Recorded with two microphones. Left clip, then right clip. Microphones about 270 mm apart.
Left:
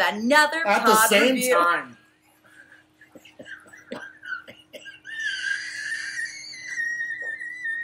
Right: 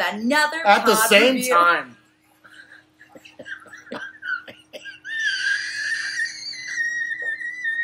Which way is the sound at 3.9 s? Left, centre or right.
Centre.